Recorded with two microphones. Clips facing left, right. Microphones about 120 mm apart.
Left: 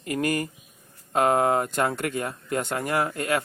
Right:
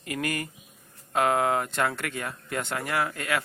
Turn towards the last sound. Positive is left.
turn(degrees=35)  # may be behind; listen again after turning